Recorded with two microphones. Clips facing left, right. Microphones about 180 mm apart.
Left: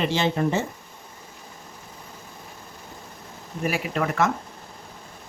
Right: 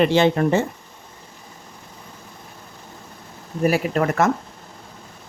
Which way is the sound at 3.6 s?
40° right (ahead or behind).